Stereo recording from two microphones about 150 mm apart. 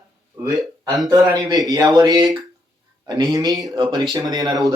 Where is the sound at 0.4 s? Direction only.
25° right (ahead or behind).